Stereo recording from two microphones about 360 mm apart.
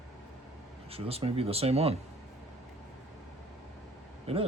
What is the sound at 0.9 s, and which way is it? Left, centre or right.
Speech, centre.